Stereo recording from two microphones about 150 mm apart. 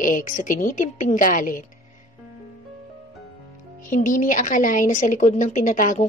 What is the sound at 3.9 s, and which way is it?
A woman's voice, 60° left (ahead or behind).